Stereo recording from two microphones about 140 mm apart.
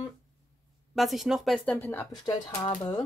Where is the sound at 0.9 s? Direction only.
Centre (ahead or behind).